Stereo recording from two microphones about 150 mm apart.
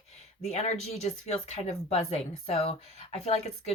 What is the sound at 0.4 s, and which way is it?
Speech, 45° left (ahead or behind).